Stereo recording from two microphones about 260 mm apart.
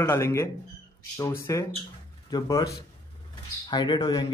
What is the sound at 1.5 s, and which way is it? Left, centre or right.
Speech, centre.